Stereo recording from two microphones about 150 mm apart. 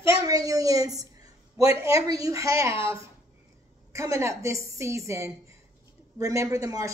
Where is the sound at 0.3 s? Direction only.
25° right (ahead or behind).